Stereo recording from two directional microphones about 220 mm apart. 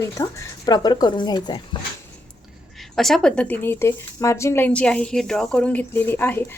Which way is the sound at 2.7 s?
Centre (ahead or behind).